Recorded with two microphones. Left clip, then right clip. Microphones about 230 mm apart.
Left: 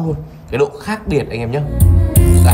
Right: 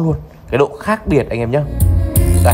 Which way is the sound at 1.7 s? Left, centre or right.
Centre.